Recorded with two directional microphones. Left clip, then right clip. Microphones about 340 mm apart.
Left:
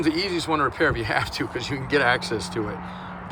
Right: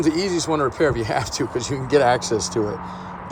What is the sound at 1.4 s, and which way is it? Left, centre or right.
Speech, centre.